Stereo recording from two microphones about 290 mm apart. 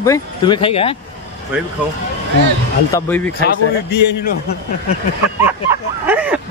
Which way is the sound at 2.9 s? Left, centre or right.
Centre.